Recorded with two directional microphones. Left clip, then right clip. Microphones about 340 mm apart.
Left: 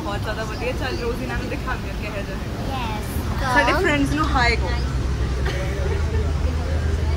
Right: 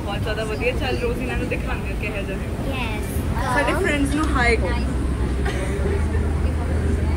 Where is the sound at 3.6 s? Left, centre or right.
Left.